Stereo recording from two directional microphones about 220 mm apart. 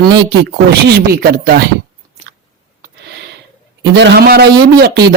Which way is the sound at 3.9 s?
50° right (ahead or behind).